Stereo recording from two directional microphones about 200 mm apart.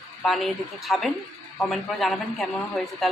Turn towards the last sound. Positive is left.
turn(degrees=0)  # may be behind; listen again after turning